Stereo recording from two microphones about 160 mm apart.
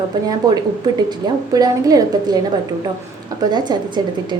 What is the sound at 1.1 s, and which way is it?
A woman's voice, 25° right (ahead or behind).